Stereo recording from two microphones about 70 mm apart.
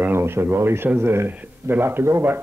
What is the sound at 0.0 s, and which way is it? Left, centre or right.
Speech, right.